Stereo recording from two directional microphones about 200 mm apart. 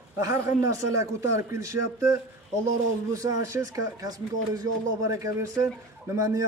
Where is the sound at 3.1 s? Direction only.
15° right (ahead or behind).